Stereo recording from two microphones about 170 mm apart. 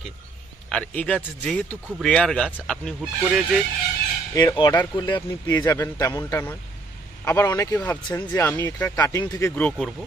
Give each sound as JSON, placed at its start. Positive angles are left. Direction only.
{"t": 0.7, "sound": "speech", "side_deg": 5}
{"t": 4.3, "sound": "speech", "side_deg": 20}